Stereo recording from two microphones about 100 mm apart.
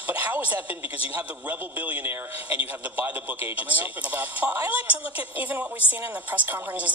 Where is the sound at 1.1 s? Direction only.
20° right (ahead or behind).